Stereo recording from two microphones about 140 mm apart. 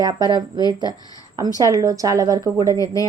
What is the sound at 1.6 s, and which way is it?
A woman's voice, 25° right (ahead or behind).